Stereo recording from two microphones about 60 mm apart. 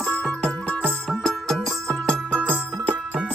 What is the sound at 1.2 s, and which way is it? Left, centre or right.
Music, centre.